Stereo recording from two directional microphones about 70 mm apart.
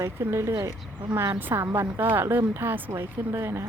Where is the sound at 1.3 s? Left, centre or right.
Right.